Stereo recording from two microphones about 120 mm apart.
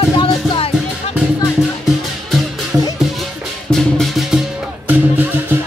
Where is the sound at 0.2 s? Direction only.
50° left (ahead or behind).